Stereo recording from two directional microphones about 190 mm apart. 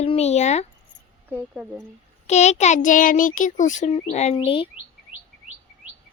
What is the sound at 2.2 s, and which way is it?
Child singing, 35° left (ahead or behind).